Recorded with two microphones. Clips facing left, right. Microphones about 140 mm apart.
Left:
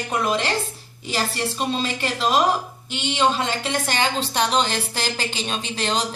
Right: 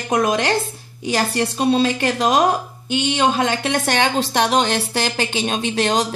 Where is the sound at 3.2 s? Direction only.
60° right (ahead or behind).